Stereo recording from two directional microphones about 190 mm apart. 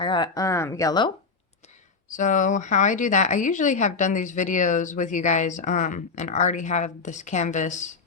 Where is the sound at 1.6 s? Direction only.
40° left (ahead or behind).